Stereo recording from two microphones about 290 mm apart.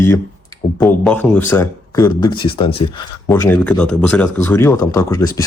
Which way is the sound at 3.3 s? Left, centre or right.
Centre.